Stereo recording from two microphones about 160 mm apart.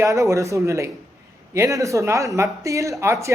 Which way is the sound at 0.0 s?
20° right (ahead or behind).